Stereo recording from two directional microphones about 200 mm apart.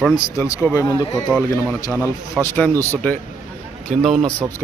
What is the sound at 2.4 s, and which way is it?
A man's voice, 10° left (ahead or behind).